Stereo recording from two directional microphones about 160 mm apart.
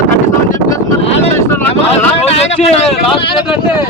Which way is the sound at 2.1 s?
40° left (ahead or behind).